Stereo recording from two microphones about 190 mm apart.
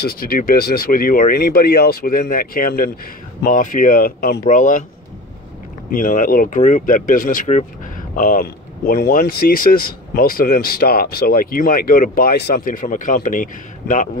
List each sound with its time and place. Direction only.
0.1 s speech: 50° left (ahead or behind)
5.9 s speech: 45° left (ahead or behind)